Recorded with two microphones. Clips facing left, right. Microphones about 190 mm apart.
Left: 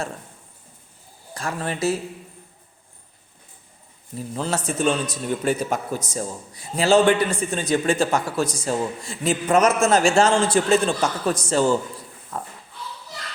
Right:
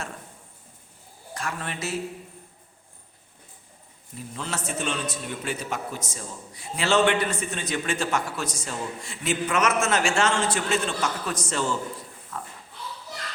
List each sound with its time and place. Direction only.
1.3 s a man's voice: 35° left (ahead or behind)
4.4 s a man's voice: 35° left (ahead or behind)